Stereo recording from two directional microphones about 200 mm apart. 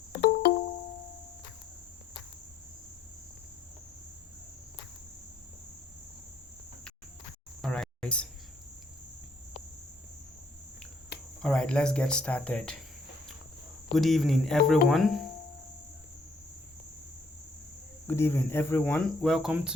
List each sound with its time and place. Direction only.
0.1 s music: 50° left (ahead or behind)
7.6 s a sound: 5° left (ahead or behind)
11.4 s speech: 5° left (ahead or behind)
13.9 s speech: centre (ahead or behind)
18.1 s speech: 10° left (ahead or behind); by 19.7 s 5° right (ahead or behind)